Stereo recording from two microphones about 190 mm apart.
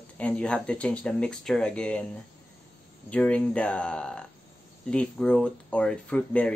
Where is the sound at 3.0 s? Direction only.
5° left (ahead or behind).